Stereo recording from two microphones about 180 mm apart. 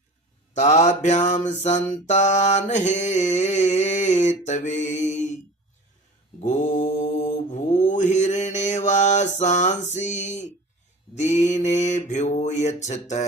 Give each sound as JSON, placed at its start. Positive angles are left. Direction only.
{"t": 0.6, "sound": "mantra", "side_deg": 40}
{"t": 6.4, "sound": "mantra", "side_deg": 40}